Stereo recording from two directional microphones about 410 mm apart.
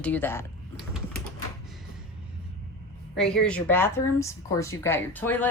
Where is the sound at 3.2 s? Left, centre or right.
Centre.